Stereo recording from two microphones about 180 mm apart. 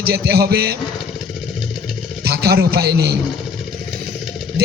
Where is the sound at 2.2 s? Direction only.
60° right (ahead or behind).